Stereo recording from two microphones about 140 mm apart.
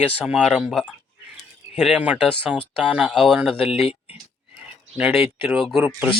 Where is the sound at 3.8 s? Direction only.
45° left (ahead or behind).